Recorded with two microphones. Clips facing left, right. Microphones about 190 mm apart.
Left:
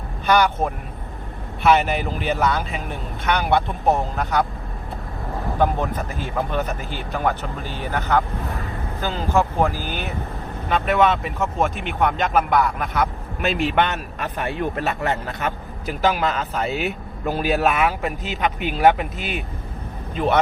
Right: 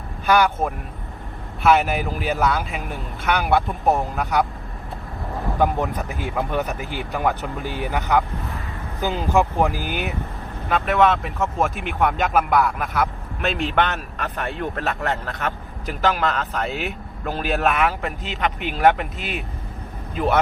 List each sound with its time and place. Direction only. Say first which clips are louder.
0.3 s speech: even; centre (ahead or behind)
5.8 s speech: even; 15° right (ahead or behind)
10.7 s speech: even; centre (ahead or behind)